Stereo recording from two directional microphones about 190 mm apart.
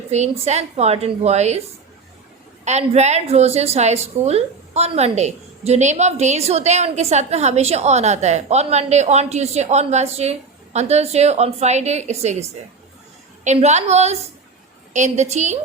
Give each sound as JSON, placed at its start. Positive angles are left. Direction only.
{"t": 0.1, "sound": "a woman's voice", "side_deg": -35}
{"t": 2.6, "sound": "a woman's voice", "side_deg": -35}